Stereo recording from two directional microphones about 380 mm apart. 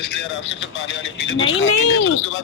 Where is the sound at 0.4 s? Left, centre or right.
Left.